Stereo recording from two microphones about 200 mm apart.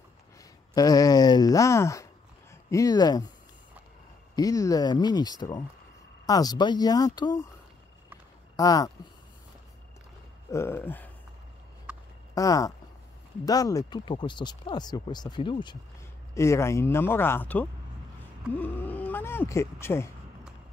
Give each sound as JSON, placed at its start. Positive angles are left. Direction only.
{"t": 0.4, "sound": "a sound", "side_deg": 20}
{"t": 2.7, "sound": "speech", "side_deg": 15}
{"t": 4.4, "sound": "speech", "side_deg": 15}
{"t": 8.5, "sound": "speech", "side_deg": 15}
{"t": 10.5, "sound": "speech", "side_deg": 10}
{"t": 11.9, "sound": "a sound", "side_deg": -5}
{"t": 12.4, "sound": "speech", "side_deg": 15}